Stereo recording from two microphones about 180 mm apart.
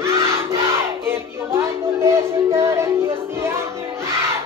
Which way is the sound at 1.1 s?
15° right (ahead or behind).